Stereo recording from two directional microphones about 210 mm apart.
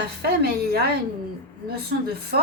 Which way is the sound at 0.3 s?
50° right (ahead or behind).